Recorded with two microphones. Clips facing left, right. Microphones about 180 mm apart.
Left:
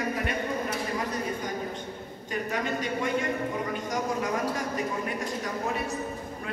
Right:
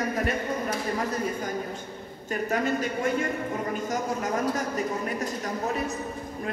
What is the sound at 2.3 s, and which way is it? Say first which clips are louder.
A man's voice: right 4 dB; 45° right (ahead or behind).